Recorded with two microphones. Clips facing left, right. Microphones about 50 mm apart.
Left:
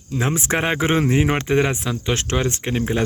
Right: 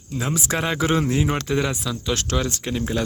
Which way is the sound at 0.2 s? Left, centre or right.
Left.